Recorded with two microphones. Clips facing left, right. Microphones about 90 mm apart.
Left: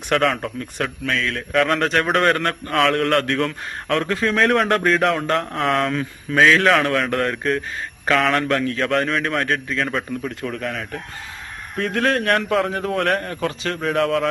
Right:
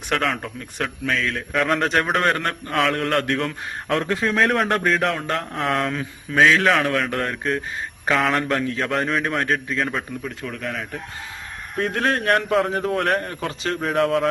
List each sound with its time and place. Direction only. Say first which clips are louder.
0.1 s a man's voice: left 4 dB; centre (ahead or behind)
11.9 s a man's voice: left 2 dB; 20° right (ahead or behind)
12.5 s a man's voice: even; 5° right (ahead or behind)